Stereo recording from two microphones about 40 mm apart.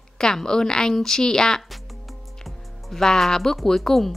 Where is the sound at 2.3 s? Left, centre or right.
Centre.